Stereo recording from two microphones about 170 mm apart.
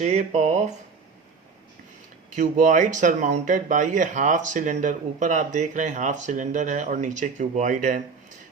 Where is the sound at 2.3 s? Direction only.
50° right (ahead or behind).